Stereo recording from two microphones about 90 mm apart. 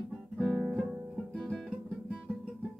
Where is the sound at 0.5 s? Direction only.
15° right (ahead or behind).